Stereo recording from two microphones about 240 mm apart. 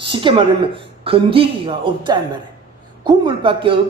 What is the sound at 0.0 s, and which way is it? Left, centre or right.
A woman's voice, right.